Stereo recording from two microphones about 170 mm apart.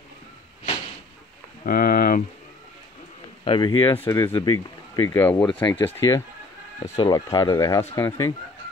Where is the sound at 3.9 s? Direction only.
15° left (ahead or behind).